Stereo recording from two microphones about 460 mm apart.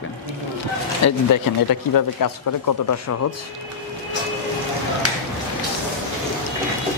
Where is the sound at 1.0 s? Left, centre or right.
Left.